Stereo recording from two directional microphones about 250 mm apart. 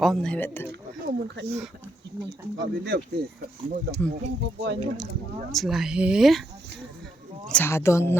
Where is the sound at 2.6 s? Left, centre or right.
Right.